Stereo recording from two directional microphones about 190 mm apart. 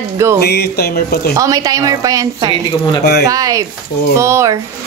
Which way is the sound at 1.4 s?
20° right (ahead or behind).